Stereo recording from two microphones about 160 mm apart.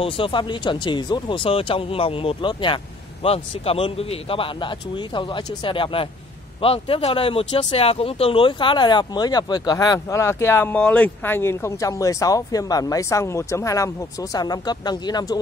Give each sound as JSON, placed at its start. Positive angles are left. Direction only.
{"t": 0.0, "sound": "speech", "side_deg": 30}